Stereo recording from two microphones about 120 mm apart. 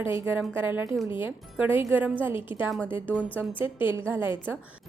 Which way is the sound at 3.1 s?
15° left (ahead or behind).